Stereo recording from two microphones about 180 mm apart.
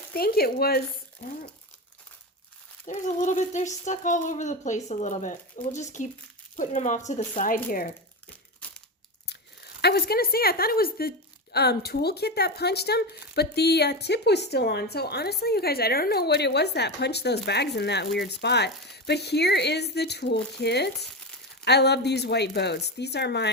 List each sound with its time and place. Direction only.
0.1 s a woman's voice: 60° left (ahead or behind)
2.8 s speech: 45° left (ahead or behind)
8.6 s crumpling: 10° left (ahead or behind)
9.8 s a woman's voice: 60° left (ahead or behind)